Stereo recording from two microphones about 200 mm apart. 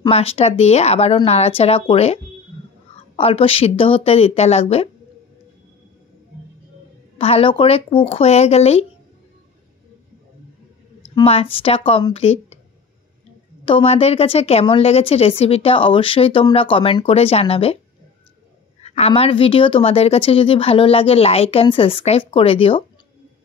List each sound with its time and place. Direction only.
0.0 s speech: 30° left (ahead or behind)
3.2 s a woman's voice: 30° left (ahead or behind)
7.2 s a woman's voice: 30° left (ahead or behind)
11.1 s a woman's voice: 30° left (ahead or behind)
13.7 s a woman's voice: 30° left (ahead or behind)
18.8 s a woman's voice: 30° left (ahead or behind)